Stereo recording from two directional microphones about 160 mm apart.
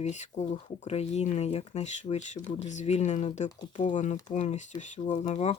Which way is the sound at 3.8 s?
50° left (ahead or behind).